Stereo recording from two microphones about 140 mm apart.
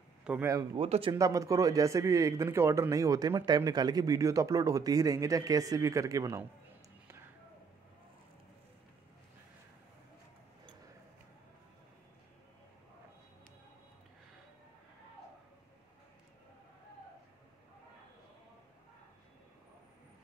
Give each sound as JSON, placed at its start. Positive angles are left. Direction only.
{"t": 0.2, "sound": "a sound", "side_deg": -10}
{"t": 0.7, "sound": "speech", "side_deg": -45}
{"t": 1.1, "sound": "speech", "side_deg": -25}